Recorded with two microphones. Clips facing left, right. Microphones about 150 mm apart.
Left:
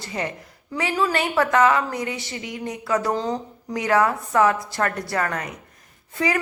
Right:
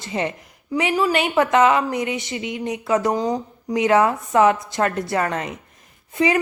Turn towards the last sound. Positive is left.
turn(degrees=-20)  # may be behind; listen again after turning